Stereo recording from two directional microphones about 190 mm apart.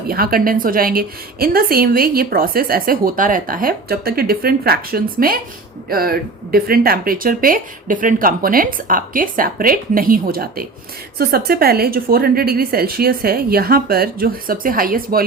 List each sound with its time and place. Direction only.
0.1 s a woman's voice: 50° right (ahead or behind)